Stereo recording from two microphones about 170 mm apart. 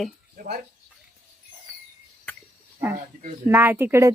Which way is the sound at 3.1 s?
55° right (ahead or behind).